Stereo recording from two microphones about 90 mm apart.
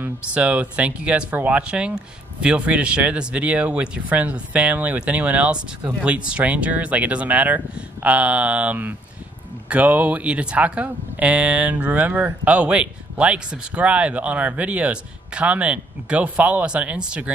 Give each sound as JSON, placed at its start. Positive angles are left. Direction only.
{"t": 0.0, "sound": "speech", "side_deg": -15}